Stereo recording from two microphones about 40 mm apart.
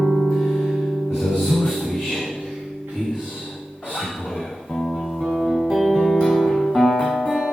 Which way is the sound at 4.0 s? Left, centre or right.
Centre.